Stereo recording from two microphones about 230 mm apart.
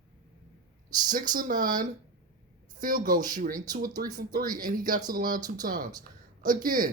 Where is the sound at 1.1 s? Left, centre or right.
Right.